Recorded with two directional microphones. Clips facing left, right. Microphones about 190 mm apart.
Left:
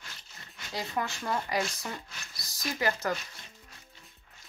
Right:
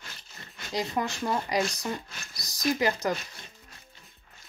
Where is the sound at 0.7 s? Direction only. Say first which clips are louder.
Right 4 dB; 15° right (ahead or behind).